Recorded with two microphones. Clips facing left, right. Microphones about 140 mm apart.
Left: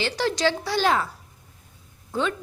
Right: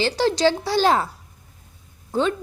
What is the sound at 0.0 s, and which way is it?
A woman's voice, 30° right (ahead or behind).